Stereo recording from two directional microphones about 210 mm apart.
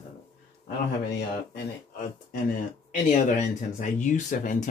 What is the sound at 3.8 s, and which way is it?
Speech, 35° left (ahead or behind).